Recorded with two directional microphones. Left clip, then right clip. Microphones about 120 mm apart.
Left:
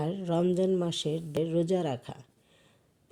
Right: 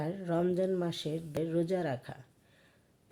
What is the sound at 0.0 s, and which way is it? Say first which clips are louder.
Speech: left 3 dB; 50° left (ahead or behind).